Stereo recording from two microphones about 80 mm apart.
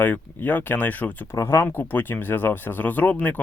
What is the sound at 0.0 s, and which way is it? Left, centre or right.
Speech, left.